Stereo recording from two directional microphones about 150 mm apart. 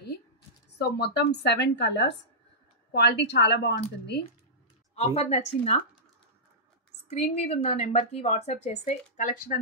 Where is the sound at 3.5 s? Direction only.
90° left.